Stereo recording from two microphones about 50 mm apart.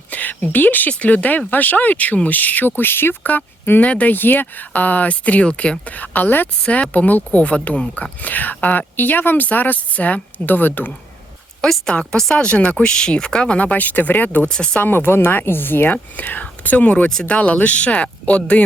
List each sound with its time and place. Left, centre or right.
0.1 s a sound: left
0.9 s speech: left
3.2 s speech: left
11.6 s a woman's voice: centre
12.1 s speech: centre; by 14.4 s left
14.4 s speech: centre
14.8 s speech: left